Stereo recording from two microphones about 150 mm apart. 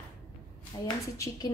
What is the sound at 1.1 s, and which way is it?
Speech, 20° left (ahead or behind).